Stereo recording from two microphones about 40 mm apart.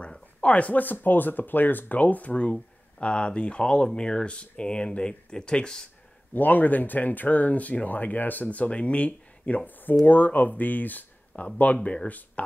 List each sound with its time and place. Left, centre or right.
0.4 s speech: left
3.0 s speech: left
6.3 s speech: left
9.7 s speech: left
11.4 s speech: left